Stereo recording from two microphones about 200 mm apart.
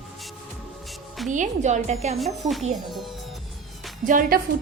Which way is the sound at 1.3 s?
35° right (ahead or behind).